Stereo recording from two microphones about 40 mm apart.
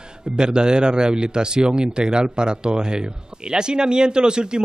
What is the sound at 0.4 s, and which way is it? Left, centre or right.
Speech, right.